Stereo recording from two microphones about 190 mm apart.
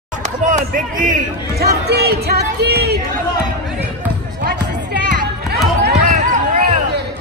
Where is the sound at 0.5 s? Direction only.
45° right (ahead or behind).